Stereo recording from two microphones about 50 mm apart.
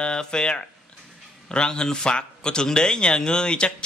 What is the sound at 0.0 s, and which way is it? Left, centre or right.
A man's voice, centre.